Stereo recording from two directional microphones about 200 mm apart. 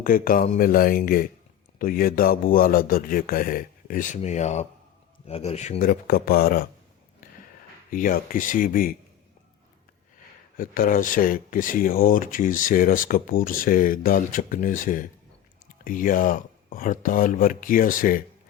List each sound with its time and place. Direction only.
0.0 s speech: 45° left (ahead or behind)
7.9 s speech: 45° left (ahead or behind)
10.6 s speech: 45° left (ahead or behind)